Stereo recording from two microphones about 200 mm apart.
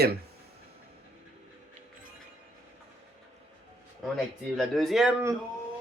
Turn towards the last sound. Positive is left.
turn(degrees=0)  # may be behind; listen again after turning